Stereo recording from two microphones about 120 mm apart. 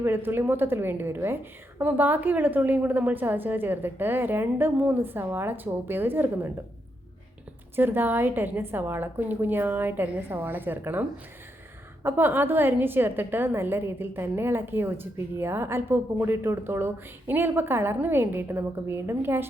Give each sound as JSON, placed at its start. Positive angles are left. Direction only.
{"t": 0.0, "sound": "a woman's voice", "side_deg": -20}
{"t": 7.8, "sound": "a woman's voice", "side_deg": -15}
{"t": 12.0, "sound": "a woman's voice", "side_deg": -20}